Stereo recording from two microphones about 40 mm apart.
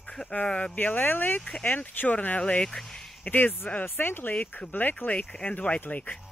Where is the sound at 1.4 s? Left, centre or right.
Left.